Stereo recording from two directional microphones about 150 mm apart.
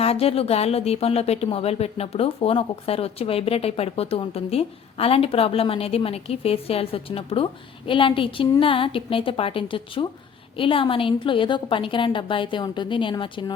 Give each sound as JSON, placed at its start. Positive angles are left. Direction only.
{"t": 0.0, "sound": "a woman's voice", "side_deg": 40}